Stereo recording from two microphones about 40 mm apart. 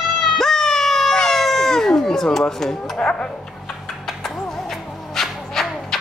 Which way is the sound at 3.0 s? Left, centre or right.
Centre.